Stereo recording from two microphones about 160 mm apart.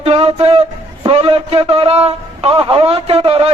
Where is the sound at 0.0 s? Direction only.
40° right (ahead or behind).